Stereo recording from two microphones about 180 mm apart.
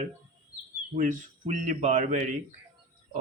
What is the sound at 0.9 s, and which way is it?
Speech, 45° right (ahead or behind).